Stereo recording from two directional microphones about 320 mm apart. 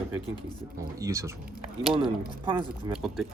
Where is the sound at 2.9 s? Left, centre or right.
Centre.